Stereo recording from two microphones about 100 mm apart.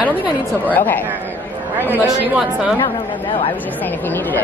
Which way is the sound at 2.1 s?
10° right (ahead or behind).